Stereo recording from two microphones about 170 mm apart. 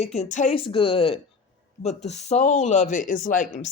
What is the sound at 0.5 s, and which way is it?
Speech, 30° left (ahead or behind).